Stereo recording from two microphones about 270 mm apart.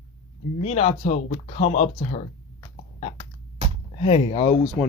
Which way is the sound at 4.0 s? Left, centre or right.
Left.